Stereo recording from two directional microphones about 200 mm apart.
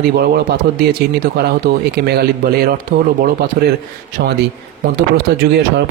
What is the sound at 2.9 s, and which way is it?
Speech, 40° right (ahead or behind).